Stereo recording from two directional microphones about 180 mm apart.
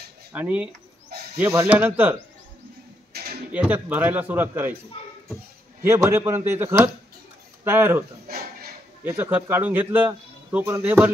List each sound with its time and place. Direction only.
0.3 s a man's voice: 10° right (ahead or behind)
3.1 s a sound: 60° right (ahead or behind)
3.5 s a man's voice: 10° right (ahead or behind)
5.9 s a man's voice: 15° right (ahead or behind)
8.3 s a sound: 55° right (ahead or behind)
9.0 s a man's voice: 10° right (ahead or behind)